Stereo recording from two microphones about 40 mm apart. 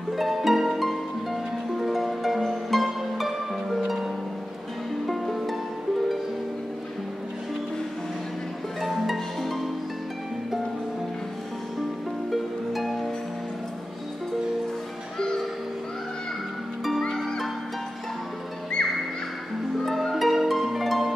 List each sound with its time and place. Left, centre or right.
0.1 s music: centre
8.8 s music: centre
12.3 s music: centre
15.1 s music: centre
18.8 s music: left
19.8 s music: centre